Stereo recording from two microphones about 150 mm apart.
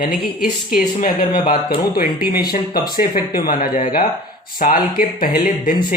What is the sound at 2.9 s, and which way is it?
Speech, 70° left (ahead or behind).